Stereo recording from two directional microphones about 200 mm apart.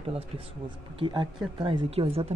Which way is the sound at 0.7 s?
25° right (ahead or behind).